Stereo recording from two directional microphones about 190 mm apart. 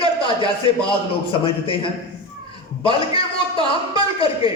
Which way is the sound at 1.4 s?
25° left (ahead or behind).